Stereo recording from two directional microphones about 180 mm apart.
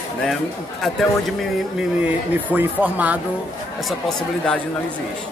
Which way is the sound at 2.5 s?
10° right (ahead or behind).